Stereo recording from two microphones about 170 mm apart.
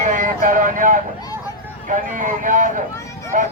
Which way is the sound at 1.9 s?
50° right (ahead or behind).